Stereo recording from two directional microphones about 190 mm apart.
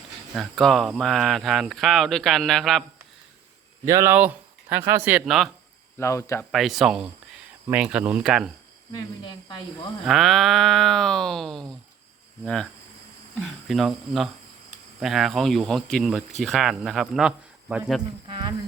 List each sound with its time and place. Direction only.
0.3 s speech: centre (ahead or behind)
3.8 s speech: 15° right (ahead or behind)
6.0 s speech: 15° left (ahead or behind)
6.5 s speech: centre (ahead or behind)
10.1 s speech: centre (ahead or behind)
13.4 s speech: centre (ahead or behind)